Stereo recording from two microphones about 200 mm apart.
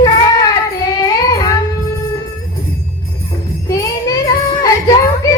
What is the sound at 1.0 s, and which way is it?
Child singing, 20° left (ahead or behind).